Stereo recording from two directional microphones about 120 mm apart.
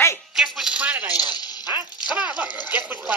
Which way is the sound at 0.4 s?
5° right (ahead or behind).